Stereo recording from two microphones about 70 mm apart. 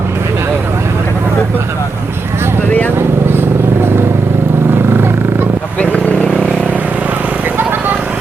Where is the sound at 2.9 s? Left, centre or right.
Right.